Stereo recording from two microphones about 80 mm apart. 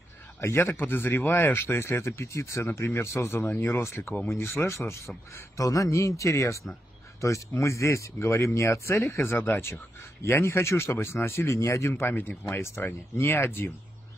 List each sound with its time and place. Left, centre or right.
0.4 s speech: left
11.9 s speech: left